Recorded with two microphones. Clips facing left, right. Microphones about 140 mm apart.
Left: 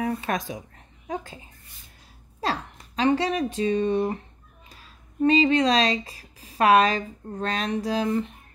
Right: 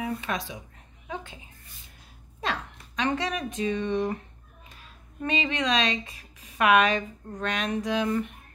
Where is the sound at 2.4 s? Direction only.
35° left (ahead or behind).